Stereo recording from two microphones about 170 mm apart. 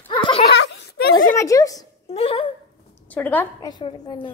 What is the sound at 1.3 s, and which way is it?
Speech, 20° left (ahead or behind).